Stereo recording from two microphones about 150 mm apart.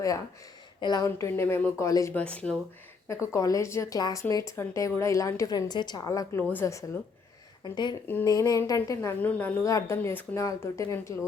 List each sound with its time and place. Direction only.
0.8 s speech: 30° left (ahead or behind)
2.1 s a woman's voice: 10° left (ahead or behind)
3.1 s a woman's voice: 20° left (ahead or behind)
7.6 s speech: 30° left (ahead or behind)
8.0 s a woman's voice: 15° left (ahead or behind)
9.0 s a woman's voice: 10° left (ahead or behind)